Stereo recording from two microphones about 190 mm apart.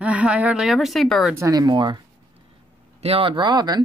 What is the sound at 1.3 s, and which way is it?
Speech, 15° right (ahead or behind).